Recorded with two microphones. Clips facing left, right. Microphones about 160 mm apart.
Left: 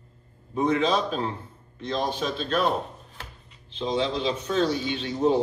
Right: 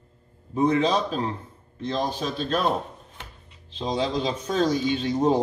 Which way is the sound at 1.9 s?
35° right (ahead or behind).